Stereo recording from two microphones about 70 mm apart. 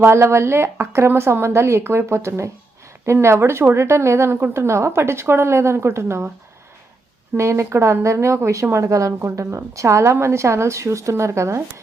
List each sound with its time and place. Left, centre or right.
0.0 s a woman's voice: right
7.3 s a woman's voice: right